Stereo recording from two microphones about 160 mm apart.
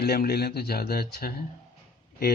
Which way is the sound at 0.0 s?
80° left.